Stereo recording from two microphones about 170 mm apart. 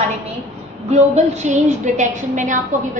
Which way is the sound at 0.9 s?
40° right (ahead or behind).